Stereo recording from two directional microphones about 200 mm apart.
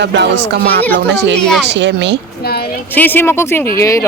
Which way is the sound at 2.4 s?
50° left (ahead or behind).